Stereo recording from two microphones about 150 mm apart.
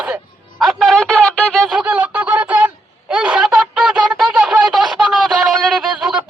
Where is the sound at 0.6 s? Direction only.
Centre (ahead or behind).